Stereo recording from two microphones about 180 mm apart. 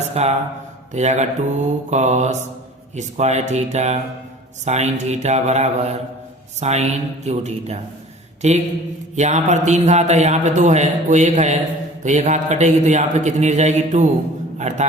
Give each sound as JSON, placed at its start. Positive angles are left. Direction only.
{"t": 0.1, "sound": "a man's voice", "side_deg": -35}